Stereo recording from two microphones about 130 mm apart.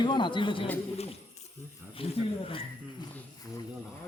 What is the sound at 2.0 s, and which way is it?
Speech, 45° left (ahead or behind).